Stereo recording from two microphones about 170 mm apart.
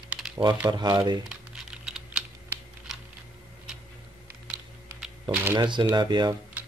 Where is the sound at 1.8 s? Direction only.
5° right (ahead or behind).